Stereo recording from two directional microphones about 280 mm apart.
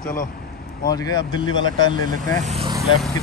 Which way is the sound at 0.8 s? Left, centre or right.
Centre.